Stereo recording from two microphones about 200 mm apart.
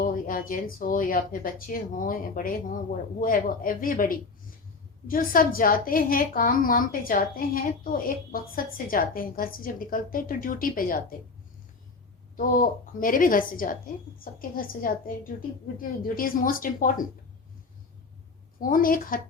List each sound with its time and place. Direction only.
0.0 s a woman's voice: 45° left (ahead or behind)
12.4 s a woman's voice: 45° left (ahead or behind)
18.6 s a woman's voice: 45° left (ahead or behind)